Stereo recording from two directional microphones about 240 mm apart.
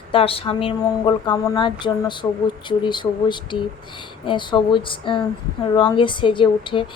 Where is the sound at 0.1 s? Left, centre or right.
Left.